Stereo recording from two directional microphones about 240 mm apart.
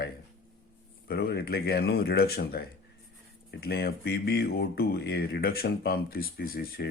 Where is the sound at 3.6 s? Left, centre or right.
Left.